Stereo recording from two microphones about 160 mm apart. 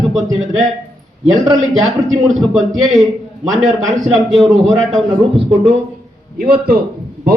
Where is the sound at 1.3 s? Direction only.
Centre (ahead or behind).